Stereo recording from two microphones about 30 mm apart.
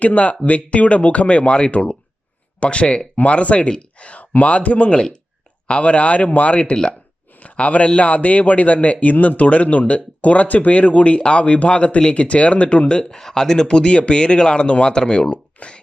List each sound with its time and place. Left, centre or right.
0.0 s speech: left
3.2 s speech: left
4.1 s a man's voice: left
13.3 s speech: centre
13.7 s speech: left